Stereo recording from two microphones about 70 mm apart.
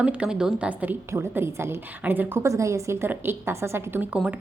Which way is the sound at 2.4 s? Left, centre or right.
Right.